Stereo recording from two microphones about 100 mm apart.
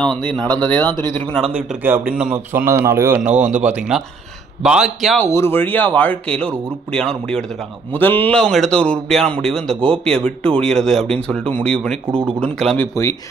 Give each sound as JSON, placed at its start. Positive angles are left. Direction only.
{"t": 0.0, "sound": "a man's voice", "side_deg": 10}
{"t": 1.8, "sound": "speech", "side_deg": -20}
{"t": 3.2, "sound": "speech", "side_deg": -10}
{"t": 5.2, "sound": "a man's voice", "side_deg": 25}
{"t": 7.9, "sound": "a man's voice", "side_deg": 20}
{"t": 13.0, "sound": "speech", "side_deg": 35}